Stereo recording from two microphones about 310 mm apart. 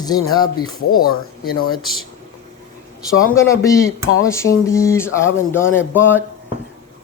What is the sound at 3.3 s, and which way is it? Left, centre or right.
Speech, centre.